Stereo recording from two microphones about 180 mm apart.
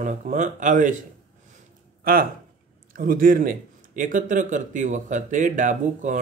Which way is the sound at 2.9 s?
50° right (ahead or behind).